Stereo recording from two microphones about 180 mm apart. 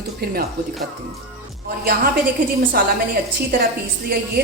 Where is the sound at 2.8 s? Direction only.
55° right (ahead or behind).